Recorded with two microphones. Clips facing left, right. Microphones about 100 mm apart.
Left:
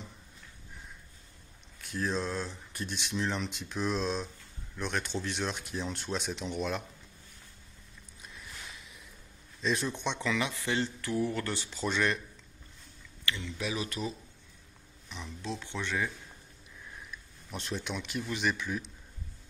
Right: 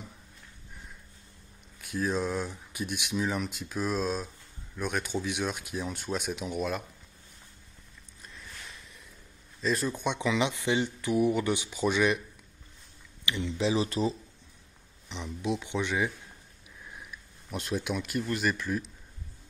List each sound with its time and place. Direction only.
1.8 s speech: 10° right (ahead or behind)
8.2 s a sound: 5° left (ahead or behind)
9.6 s speech: centre (ahead or behind)
13.2 s speech: 20° right (ahead or behind)
15.0 s speech: 20° right (ahead or behind)
17.1 s speech: 5° right (ahead or behind)